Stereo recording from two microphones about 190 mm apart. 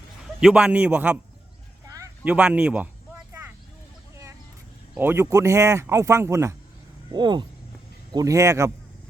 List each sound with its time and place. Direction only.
0.3 s speech: 5° right (ahead or behind)
2.2 s speech: 5° right (ahead or behind)
4.9 s speech: 10° right (ahead or behind)